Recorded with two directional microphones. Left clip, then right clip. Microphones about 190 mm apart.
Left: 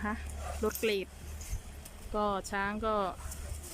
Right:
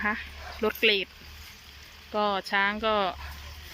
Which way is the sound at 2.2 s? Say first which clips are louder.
Right 7 dB; 10° left (ahead or behind).